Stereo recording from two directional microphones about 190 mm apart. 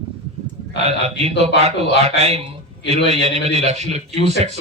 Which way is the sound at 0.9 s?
35° right (ahead or behind).